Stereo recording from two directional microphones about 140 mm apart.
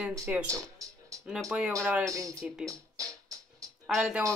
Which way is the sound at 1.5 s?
5° right (ahead or behind).